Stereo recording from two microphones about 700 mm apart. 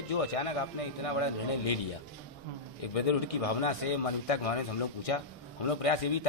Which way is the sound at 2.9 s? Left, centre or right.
Left.